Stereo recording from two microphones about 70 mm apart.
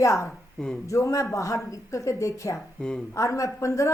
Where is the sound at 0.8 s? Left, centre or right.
Left.